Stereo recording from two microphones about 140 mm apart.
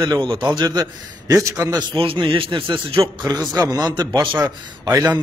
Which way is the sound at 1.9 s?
40° right (ahead or behind).